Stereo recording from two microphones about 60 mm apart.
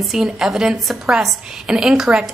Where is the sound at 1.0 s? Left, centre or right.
Centre.